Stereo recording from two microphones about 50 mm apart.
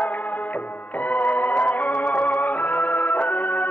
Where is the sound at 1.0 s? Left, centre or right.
Left.